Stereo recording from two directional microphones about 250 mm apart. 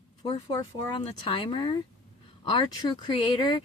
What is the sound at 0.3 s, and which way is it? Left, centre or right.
Speech, centre.